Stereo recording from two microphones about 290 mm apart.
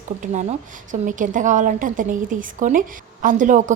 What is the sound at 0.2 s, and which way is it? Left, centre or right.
A woman's voice, right.